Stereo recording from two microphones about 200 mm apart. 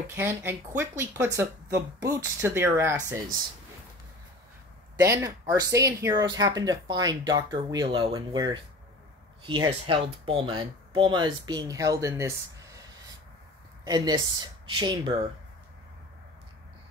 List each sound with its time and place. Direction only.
0.1 s speech: 10° right (ahead or behind)
5.0 s speech: 15° right (ahead or behind)
13.8 s speech: 20° right (ahead or behind)